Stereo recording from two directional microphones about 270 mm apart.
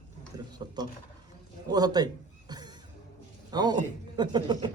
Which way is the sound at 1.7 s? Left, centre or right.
Centre.